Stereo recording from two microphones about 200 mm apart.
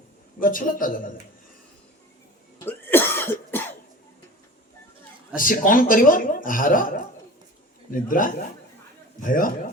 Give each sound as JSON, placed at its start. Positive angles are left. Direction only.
{"t": 0.3, "sound": "speech", "side_deg": 45}
{"t": 2.6, "sound": "cough", "side_deg": 10}
{"t": 5.4, "sound": "speech", "side_deg": 45}